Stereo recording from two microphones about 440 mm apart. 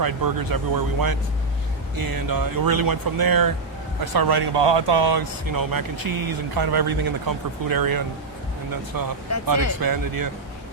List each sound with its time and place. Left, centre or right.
0.0 s speech: right